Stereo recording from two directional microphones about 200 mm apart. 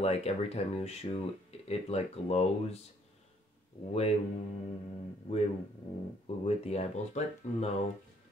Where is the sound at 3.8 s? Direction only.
30° left (ahead or behind).